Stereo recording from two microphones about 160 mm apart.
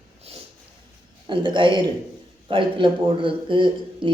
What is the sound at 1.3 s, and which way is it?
Speech, 30° right (ahead or behind).